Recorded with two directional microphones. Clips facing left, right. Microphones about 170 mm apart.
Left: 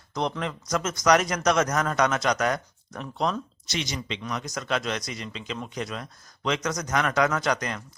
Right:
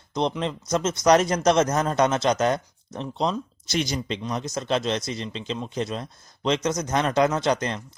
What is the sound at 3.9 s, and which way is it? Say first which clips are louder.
Speech: right 4 dB; 35° right (ahead or behind).